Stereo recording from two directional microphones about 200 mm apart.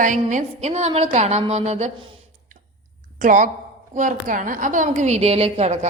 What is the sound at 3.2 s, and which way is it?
A woman's voice, 40° right (ahead or behind).